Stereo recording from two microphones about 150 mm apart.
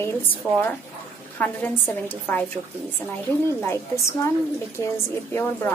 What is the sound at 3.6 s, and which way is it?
Speech, 15° left (ahead or behind).